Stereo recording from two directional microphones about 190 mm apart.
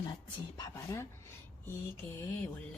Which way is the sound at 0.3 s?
20° left (ahead or behind).